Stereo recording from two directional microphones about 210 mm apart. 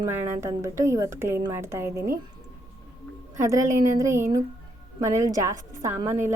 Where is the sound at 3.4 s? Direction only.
15° right (ahead or behind).